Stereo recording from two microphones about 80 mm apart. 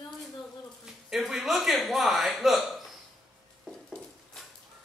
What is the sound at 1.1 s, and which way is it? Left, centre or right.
A man's voice, centre.